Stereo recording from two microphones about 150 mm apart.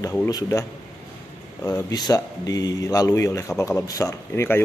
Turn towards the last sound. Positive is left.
turn(degrees=15)  # may be behind; listen again after turning